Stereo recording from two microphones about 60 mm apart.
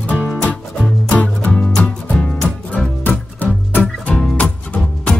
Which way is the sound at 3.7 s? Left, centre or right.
Left.